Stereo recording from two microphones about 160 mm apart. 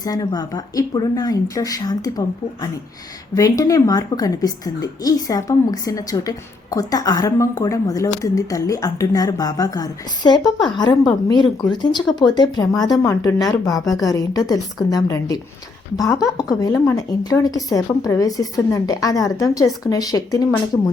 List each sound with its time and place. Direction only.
0.0 s a woman's voice: 25° left (ahead or behind)